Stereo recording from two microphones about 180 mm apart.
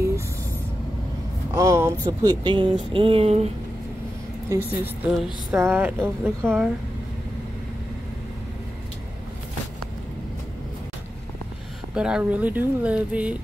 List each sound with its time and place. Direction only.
1.5 s speech: 15° right (ahead or behind)
2.9 s a sound: 30° right (ahead or behind)
4.5 s speech: 10° right (ahead or behind)
11.9 s speech: 5° right (ahead or behind)